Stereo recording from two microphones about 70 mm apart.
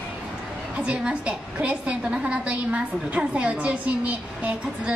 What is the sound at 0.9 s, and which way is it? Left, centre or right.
A woman's voice, centre.